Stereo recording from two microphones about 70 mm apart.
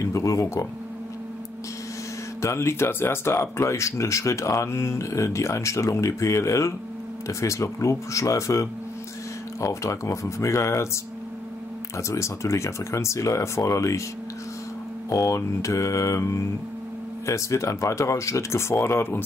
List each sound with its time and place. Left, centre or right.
0.0 s speech: left
2.4 s speech: left
12.0 s speech: left
15.0 s speech: left